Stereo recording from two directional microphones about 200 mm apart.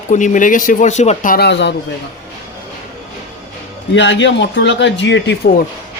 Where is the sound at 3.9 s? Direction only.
65° left (ahead or behind).